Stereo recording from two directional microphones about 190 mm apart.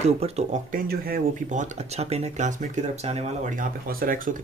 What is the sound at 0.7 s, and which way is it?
Speech, 55° right (ahead or behind).